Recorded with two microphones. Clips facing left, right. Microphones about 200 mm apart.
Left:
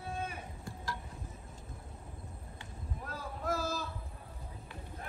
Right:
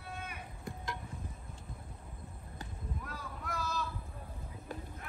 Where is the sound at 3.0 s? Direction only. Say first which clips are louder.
Left 4 dB; 30° left (ahead or behind).